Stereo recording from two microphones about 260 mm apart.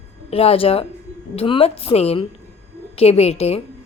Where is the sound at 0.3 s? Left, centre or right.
Left.